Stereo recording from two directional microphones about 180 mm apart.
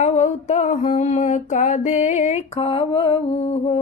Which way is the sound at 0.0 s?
40° left (ahead or behind).